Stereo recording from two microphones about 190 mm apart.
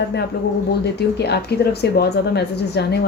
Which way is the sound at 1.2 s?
60° left (ahead or behind).